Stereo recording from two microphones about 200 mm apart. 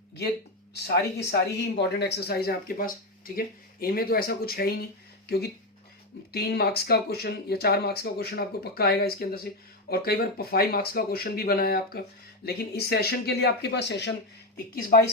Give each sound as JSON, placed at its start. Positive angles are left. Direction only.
{"t": 1.3, "sound": "speech", "side_deg": 55}
{"t": 14.5, "sound": "speech", "side_deg": 45}